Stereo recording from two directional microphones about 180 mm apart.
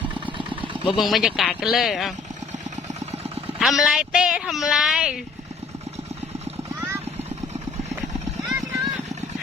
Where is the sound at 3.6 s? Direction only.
Centre (ahead or behind).